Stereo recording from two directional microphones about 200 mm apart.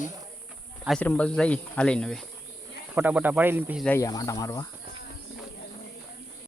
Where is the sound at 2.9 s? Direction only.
10° right (ahead or behind).